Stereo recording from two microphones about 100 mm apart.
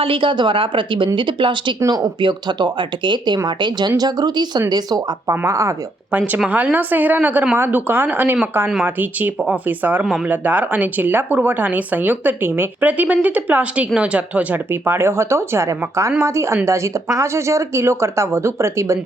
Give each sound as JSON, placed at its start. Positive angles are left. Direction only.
{"t": 0.0, "sound": "a woman's voice", "side_deg": -60}
{"t": 1.8, "sound": "speech", "side_deg": -30}
{"t": 2.2, "sound": "speech", "side_deg": -45}
{"t": 5.3, "sound": "speech", "side_deg": -30}
{"t": 6.1, "sound": "speech", "side_deg": -15}